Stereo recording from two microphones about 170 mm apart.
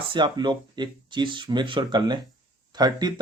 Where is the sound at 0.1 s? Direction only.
25° right (ahead or behind).